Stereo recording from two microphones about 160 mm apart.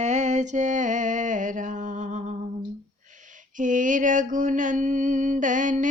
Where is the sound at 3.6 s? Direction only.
55° right (ahead or behind).